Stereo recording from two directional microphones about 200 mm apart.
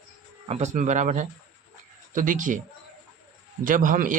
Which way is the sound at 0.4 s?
35° right (ahead or behind).